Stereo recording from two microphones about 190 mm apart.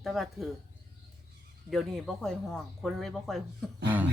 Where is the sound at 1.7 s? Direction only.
Centre (ahead or behind).